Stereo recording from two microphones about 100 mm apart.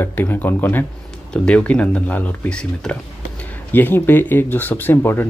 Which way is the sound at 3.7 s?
20° left (ahead or behind).